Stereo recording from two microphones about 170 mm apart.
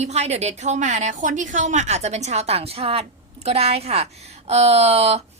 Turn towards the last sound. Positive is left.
turn(degrees=-35)  # may be behind; listen again after turning